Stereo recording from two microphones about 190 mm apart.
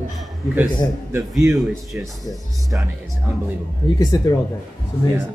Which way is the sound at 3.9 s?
20° left (ahead or behind).